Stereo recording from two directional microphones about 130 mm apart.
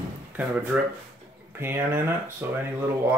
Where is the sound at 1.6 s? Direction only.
15° right (ahead or behind).